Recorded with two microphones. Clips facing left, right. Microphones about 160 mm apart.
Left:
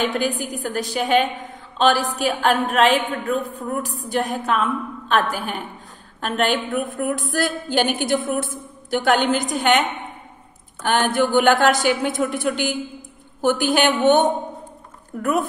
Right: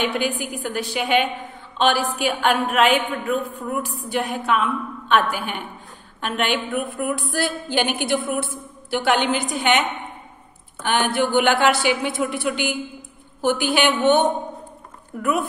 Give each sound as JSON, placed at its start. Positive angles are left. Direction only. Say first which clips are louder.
{"t": 0.0, "sound": "a woman's voice", "louder": "left 1 dB", "side_deg": 40}